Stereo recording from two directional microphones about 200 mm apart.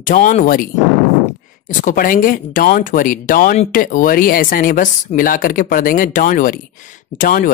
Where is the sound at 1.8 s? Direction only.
40° left (ahead or behind).